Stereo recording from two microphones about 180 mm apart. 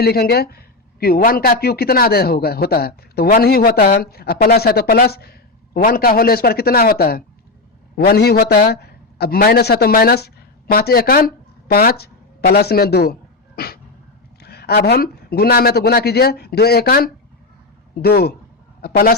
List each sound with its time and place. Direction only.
0.0 s a man's voice: 60° left (ahead or behind)
14.3 s a man's voice: 60° left (ahead or behind)